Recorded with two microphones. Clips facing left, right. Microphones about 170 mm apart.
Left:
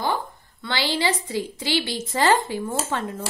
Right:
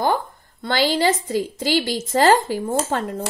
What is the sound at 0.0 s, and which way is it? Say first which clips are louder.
A woman's voice: right 5 dB; 45° right (ahead or behind).